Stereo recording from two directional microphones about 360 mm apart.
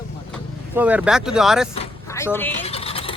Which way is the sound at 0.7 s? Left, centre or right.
Centre.